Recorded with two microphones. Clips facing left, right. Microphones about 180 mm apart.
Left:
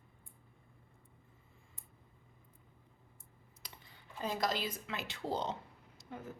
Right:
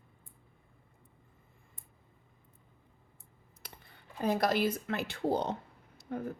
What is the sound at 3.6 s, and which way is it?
A woman's voice, 60° right (ahead or behind).